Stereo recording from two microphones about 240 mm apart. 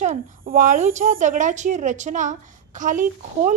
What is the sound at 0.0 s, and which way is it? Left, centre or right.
A woman's voice, right.